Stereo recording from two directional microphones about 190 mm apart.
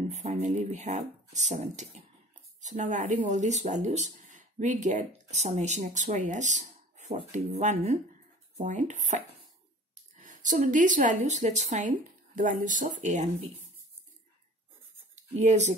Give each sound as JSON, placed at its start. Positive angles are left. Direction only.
{"t": 0.1, "sound": "speech", "side_deg": -35}
{"t": 15.1, "sound": "speech", "side_deg": -40}